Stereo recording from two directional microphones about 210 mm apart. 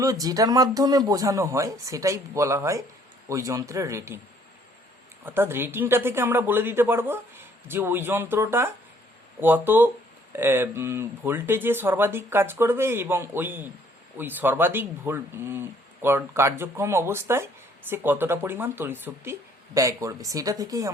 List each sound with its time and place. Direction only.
0.0 s speech: 15° right (ahead or behind)
5.2 s speech: 10° right (ahead or behind)